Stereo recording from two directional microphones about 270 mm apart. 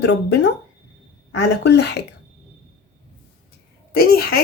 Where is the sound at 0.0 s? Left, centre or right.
Left.